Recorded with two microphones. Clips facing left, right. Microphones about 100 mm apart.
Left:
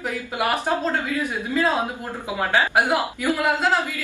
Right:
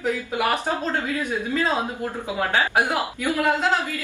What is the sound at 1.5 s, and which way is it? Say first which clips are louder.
Speech: left 3 dB; 15° left (ahead or behind).